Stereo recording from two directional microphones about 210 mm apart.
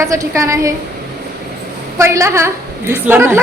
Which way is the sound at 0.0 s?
15° right (ahead or behind).